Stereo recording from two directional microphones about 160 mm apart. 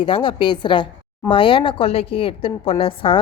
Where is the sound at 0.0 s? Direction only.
30° left (ahead or behind).